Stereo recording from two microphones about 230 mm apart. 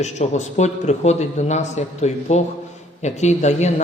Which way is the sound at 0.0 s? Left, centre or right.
Left.